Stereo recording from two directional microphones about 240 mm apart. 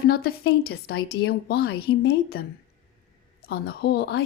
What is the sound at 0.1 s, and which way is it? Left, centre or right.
Speech, left.